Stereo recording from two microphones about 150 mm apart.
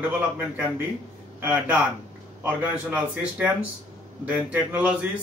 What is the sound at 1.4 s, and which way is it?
Speech, 10° right (ahead or behind).